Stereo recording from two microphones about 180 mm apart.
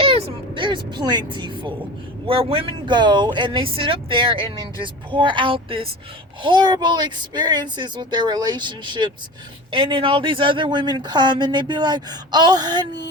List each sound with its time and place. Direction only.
0.0 s vehicle: 30° right (ahead or behind)
2.2 s speech: 30° right (ahead or behind)